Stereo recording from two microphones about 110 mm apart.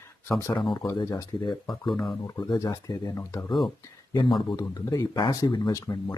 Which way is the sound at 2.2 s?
30° left (ahead or behind).